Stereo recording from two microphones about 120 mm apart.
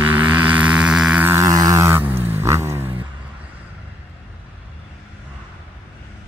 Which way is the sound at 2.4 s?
25° right (ahead or behind).